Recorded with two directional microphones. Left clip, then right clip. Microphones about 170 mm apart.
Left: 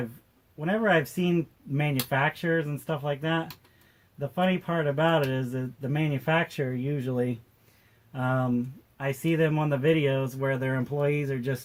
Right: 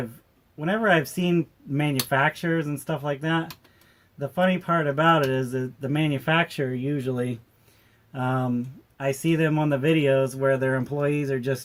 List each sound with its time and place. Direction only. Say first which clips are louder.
0.6 s speech: right 3 dB; 30° right (ahead or behind)